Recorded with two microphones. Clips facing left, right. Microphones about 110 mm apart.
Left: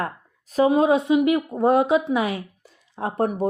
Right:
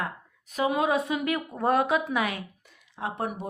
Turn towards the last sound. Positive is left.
turn(degrees=40)  # may be behind; listen again after turning